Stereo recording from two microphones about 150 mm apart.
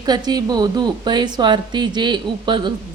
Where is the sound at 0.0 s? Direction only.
30° right (ahead or behind).